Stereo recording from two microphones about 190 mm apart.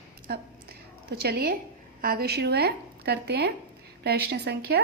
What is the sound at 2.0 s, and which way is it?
A woman's voice, 50° right (ahead or behind).